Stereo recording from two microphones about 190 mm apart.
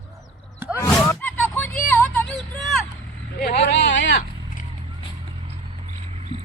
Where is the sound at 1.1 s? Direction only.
10° left (ahead or behind).